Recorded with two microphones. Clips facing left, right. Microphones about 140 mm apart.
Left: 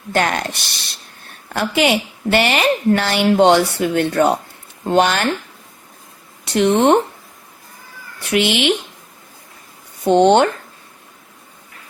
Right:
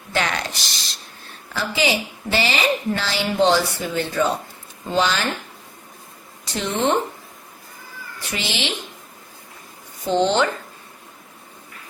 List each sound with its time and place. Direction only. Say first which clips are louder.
0.1 s a woman's voice: left 5 dB; 50° left (ahead or behind)
6.4 s speech: left 9 dB; 65° left (ahead or behind)
8.3 s a woman's voice: left 11 dB; 60° left (ahead or behind)
10.0 s a woman's voice: left 7 dB; 60° left (ahead or behind)